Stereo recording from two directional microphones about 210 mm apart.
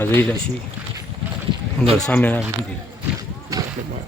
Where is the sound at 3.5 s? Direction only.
15° right (ahead or behind).